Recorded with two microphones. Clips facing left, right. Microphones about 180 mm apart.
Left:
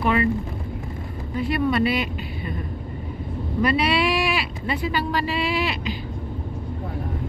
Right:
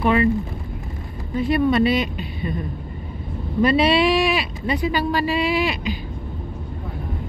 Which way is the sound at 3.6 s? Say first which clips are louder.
Right 5 dB; 25° right (ahead or behind).